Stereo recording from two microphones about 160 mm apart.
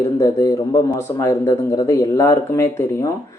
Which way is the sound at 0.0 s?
20° left (ahead or behind).